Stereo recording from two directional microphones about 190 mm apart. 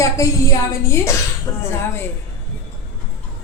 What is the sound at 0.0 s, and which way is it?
A woman's voice, 15° left (ahead or behind).